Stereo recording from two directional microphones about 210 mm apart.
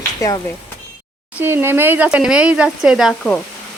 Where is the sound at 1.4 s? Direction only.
10° right (ahead or behind).